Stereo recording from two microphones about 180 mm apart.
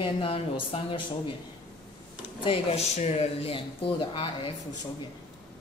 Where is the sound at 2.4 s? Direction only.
35° left (ahead or behind).